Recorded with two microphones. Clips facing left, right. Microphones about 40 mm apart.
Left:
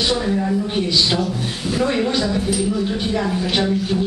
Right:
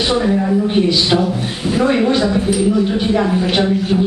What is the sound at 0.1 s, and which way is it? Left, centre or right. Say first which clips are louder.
A woman's voice: right 5 dB; centre.